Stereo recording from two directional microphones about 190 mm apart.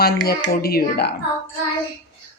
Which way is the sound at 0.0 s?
55° left (ahead or behind).